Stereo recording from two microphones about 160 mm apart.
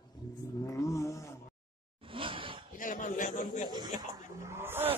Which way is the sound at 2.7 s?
55° left (ahead or behind).